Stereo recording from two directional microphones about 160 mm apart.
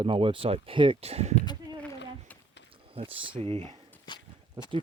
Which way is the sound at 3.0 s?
35° right (ahead or behind).